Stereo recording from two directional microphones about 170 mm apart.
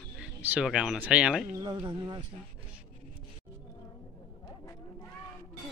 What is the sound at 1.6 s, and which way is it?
Speech, 25° right (ahead or behind).